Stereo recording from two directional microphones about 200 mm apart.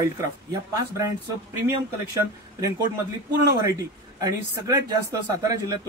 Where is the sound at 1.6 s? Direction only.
15° right (ahead or behind).